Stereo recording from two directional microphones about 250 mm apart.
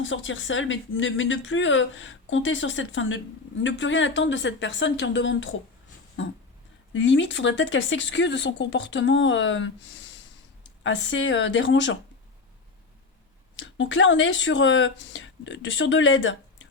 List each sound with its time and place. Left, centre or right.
0.0 s speech: left
6.9 s speech: left
13.6 s speech: left